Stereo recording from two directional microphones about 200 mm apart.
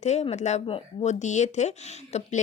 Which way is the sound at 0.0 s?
35° left (ahead or behind).